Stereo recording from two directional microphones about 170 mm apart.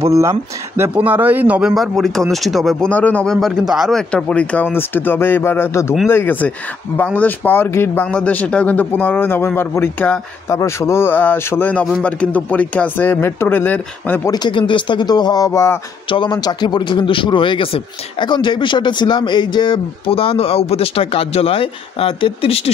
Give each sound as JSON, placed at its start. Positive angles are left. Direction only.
{"t": 0.0, "sound": "speech", "side_deg": -15}
{"t": 1.8, "sound": "speech", "side_deg": 0}
{"t": 14.3, "sound": "a man's voice", "side_deg": 25}